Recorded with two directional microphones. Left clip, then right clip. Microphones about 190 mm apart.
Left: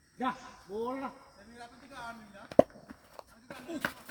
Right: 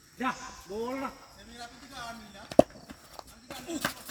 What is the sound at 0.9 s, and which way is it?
Speech, 55° left (ahead or behind).